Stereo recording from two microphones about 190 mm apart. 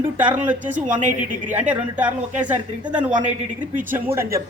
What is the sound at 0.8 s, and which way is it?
Speech, 40° right (ahead or behind).